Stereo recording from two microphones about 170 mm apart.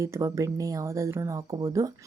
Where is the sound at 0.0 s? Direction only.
20° right (ahead or behind).